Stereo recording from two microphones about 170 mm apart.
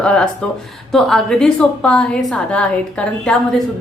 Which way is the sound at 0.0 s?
5° left (ahead or behind).